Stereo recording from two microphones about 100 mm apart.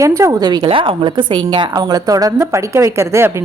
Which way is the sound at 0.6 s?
60° right (ahead or behind).